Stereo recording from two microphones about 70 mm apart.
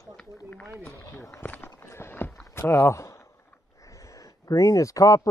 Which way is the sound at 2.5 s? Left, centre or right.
Left.